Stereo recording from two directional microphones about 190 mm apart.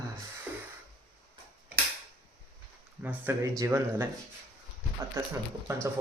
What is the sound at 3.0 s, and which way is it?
Speech, 10° right (ahead or behind).